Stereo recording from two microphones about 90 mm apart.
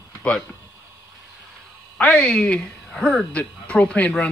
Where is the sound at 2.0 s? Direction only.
15° left (ahead or behind).